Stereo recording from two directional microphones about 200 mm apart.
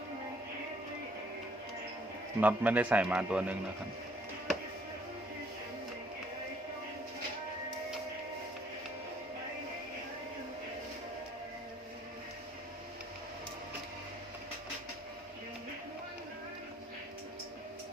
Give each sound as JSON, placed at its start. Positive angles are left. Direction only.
{"t": 2.4, "sound": "a man's voice", "side_deg": -10}